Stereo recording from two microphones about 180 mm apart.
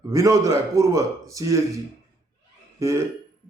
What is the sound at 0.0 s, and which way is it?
Speech, 20° right (ahead or behind).